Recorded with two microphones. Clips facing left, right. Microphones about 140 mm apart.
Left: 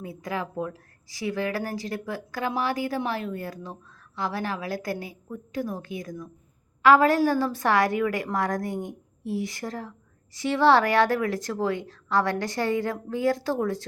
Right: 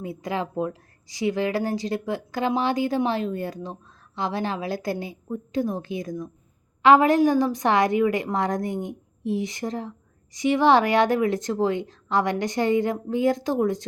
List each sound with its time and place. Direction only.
0.0 s a woman's voice: 25° right (ahead or behind)